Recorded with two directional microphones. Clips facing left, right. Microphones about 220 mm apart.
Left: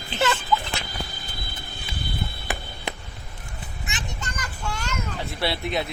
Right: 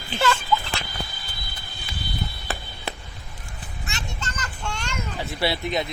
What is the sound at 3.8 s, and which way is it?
Child singing, 15° left (ahead or behind).